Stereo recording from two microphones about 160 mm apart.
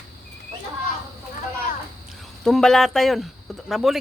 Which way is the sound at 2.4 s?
5° left (ahead or behind).